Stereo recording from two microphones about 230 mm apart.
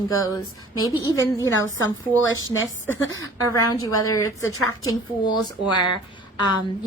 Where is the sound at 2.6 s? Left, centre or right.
Left.